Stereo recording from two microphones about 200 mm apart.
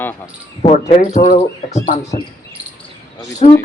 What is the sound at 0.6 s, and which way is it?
Speech, 35° left (ahead or behind).